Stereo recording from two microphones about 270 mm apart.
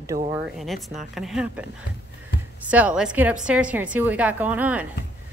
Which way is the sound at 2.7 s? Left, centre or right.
Centre.